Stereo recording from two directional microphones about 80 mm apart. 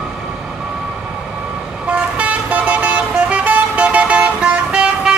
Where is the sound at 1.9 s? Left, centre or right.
Centre.